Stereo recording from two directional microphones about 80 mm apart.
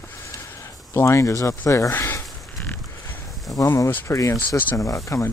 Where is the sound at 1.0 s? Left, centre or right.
Left.